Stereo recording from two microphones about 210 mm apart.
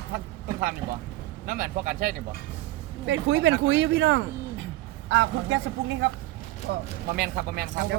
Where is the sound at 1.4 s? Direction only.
40° right (ahead or behind).